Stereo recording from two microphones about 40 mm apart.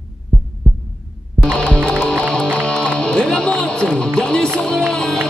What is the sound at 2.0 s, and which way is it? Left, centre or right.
Music, centre.